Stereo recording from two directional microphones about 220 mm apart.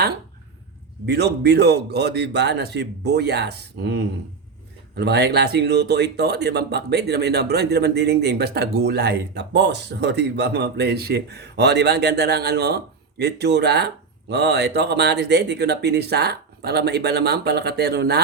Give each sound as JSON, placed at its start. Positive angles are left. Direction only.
{"t": 1.0, "sound": "speech", "side_deg": -50}